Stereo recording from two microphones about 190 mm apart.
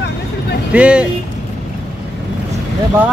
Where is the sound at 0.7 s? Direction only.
5° right (ahead or behind).